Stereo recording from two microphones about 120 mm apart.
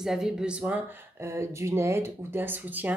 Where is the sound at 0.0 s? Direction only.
5° right (ahead or behind).